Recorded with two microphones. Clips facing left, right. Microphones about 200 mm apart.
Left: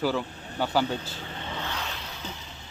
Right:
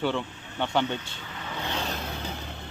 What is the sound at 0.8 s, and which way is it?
Speech, 35° left (ahead or behind).